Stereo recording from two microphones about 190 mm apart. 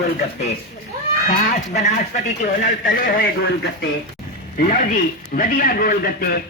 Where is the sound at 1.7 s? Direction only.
35° left (ahead or behind); by 3.8 s 60° left (ahead or behind).